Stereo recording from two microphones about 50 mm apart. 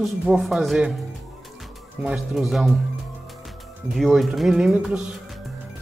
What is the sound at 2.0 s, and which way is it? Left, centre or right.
Speech, centre.